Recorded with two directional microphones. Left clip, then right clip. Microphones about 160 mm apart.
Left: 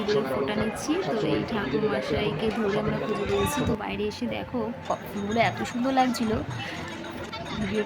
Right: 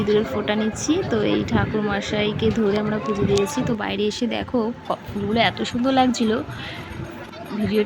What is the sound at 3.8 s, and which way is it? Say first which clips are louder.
Speech: right 7 dB; 30° right (ahead or behind).